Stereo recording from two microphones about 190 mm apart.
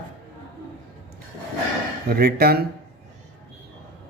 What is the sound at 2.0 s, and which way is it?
Speech, 55° right (ahead or behind).